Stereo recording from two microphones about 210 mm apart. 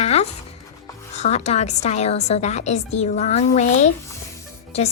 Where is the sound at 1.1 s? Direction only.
30° left (ahead or behind).